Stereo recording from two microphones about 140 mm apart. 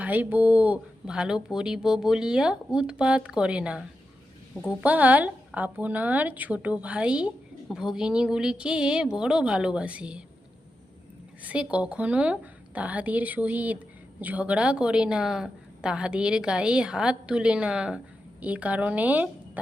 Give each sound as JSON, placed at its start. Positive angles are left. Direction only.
{"t": 0.0, "sound": "a woman's voice", "side_deg": -10}
{"t": 11.4, "sound": "a woman's voice", "side_deg": -10}